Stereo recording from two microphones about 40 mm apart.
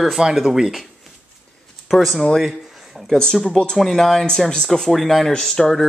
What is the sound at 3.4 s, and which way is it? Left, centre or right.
Music, centre.